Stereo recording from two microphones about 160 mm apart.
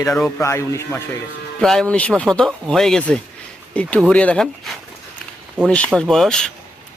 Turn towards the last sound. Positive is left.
turn(degrees=5)  # may be behind; listen again after turning